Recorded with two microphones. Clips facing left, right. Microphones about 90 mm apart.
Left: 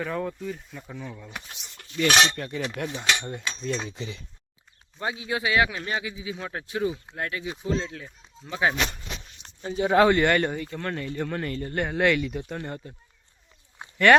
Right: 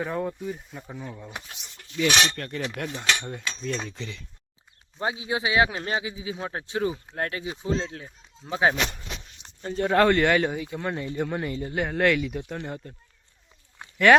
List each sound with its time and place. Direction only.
0.0 s speech: 15° right (ahead or behind)
2.3 s speech: 5° left (ahead or behind)
4.9 s a man's voice: 25° right (ahead or behind)
9.6 s speech: 5° left (ahead or behind)
13.8 s a sound: 20° left (ahead or behind)